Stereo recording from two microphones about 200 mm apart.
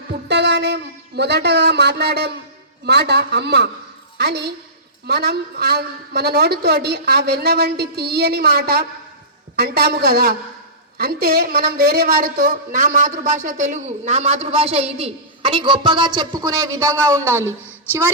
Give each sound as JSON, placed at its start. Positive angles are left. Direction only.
{"t": 0.1, "sound": "a woman's voice", "side_deg": -60}